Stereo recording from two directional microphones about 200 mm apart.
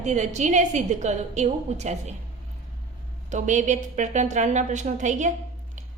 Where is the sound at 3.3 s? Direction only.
35° right (ahead or behind).